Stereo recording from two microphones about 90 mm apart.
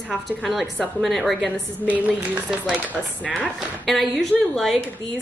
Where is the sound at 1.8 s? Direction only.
15° right (ahead or behind).